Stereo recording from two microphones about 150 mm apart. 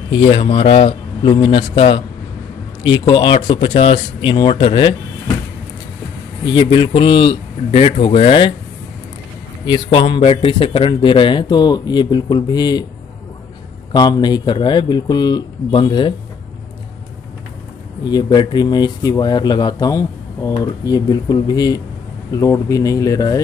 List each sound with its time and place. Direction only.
0.1 s a man's voice: 35° left (ahead or behind)
6.4 s a man's voice: 35° left (ahead or behind)
9.7 s a man's voice: 35° left (ahead or behind)
13.9 s speech: 30° left (ahead or behind)
18.0 s speech: 30° left (ahead or behind)